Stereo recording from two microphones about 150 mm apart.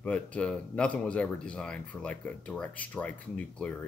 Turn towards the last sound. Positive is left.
turn(degrees=10)  # may be behind; listen again after turning